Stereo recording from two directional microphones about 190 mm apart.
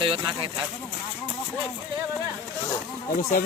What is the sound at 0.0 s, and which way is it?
Speech, 30° right (ahead or behind).